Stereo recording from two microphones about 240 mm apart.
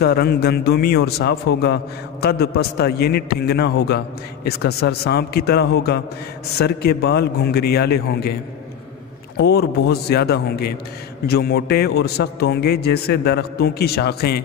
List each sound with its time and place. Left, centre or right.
0.0 s a man's voice: left
9.4 s a man's voice: left